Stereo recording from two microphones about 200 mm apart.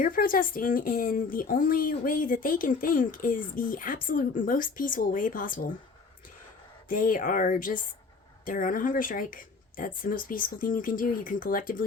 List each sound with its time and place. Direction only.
0.0 s speech: 45° left (ahead or behind)
6.8 s speech: 45° left (ahead or behind)